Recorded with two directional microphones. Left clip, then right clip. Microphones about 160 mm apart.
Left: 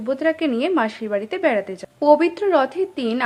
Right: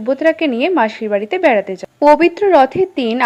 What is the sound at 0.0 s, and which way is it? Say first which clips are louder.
A woman's voice: right 6 dB; 20° right (ahead or behind).